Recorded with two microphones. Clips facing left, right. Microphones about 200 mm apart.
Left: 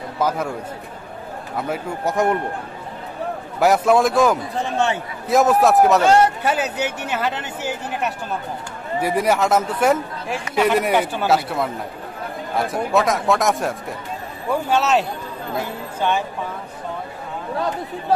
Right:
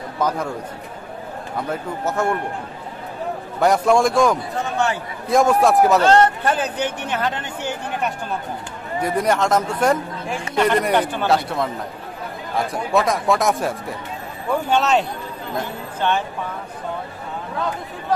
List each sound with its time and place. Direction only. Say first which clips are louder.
0.2 s a man's voice: left 1 dB; 5° left (ahead or behind)
1.7 s a man's voice: left 1 dB; 15° left (ahead or behind)
3.5 s speech: left 1 dB; 5° left (ahead or behind)
4.6 s a man's voice: left 1 dB; 25° left (ahead or behind)
5.3 s a man's voice: even; 5° left (ahead or behind)